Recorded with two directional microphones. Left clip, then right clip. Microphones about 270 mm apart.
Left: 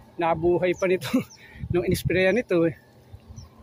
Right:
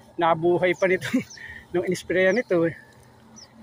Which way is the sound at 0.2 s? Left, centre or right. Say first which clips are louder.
Right 2 dB; centre.